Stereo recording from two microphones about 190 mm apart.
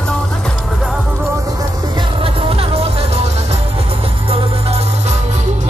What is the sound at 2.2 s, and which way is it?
Music, 30° right (ahead or behind).